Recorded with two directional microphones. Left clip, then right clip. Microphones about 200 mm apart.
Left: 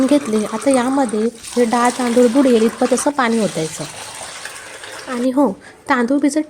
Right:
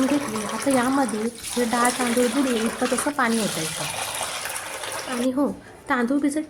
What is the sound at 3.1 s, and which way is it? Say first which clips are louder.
Speech: left 6 dB; 20° left (ahead or behind).